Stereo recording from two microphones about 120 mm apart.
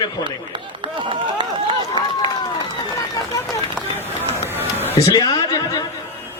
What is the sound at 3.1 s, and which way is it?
Speech, 30° left (ahead or behind).